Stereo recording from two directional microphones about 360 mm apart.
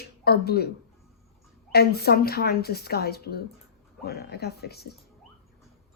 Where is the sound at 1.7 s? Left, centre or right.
Left.